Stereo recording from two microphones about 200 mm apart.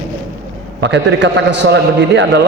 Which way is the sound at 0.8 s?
60° right (ahead or behind).